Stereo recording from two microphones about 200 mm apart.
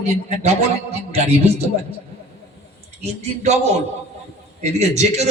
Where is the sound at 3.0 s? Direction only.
35° right (ahead or behind).